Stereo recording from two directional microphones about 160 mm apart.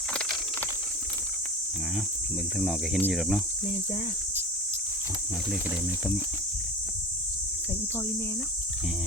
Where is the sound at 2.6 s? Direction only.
Centre (ahead or behind).